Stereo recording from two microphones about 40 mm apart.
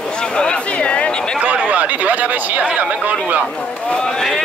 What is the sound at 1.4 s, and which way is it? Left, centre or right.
Speech, right.